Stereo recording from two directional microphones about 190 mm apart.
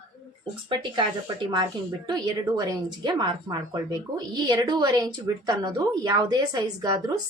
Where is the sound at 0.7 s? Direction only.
25° right (ahead or behind).